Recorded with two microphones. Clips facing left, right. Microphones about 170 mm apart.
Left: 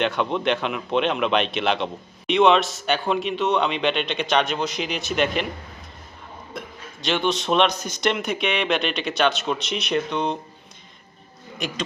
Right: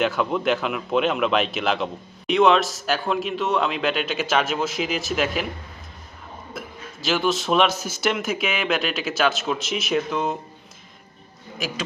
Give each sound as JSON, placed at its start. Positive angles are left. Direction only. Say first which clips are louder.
{"t": 0.0, "sound": "a man's voice", "louder": "right 1 dB", "side_deg": 0}
{"t": 6.5, "sound": "a man's voice", "louder": "even", "side_deg": -5}
{"t": 11.6, "sound": "a man's voice", "louder": "even", "side_deg": 0}